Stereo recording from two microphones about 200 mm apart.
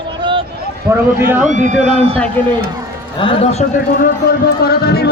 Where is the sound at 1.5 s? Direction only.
40° right (ahead or behind).